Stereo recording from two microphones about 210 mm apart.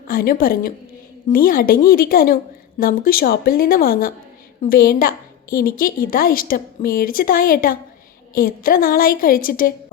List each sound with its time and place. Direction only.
0.1 s a woman's voice: 45° left (ahead or behind)